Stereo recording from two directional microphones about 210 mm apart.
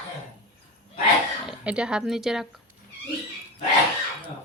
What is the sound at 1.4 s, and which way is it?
Speech, 5° right (ahead or behind).